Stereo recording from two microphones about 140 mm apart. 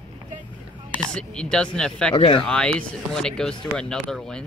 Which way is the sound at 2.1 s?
45° left (ahead or behind).